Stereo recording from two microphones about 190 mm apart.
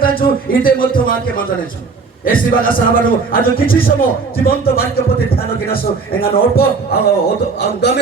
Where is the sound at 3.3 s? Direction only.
50° left (ahead or behind).